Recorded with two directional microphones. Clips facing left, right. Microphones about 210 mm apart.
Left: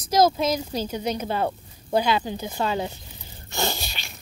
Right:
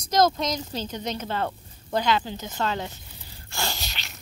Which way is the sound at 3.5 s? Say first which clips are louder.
Left 5 dB; 15° left (ahead or behind).